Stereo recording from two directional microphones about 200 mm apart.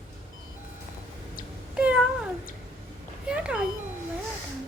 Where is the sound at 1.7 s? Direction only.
5° right (ahead or behind).